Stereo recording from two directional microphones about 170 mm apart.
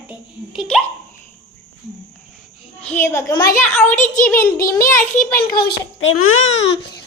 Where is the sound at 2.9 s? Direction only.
15° left (ahead or behind).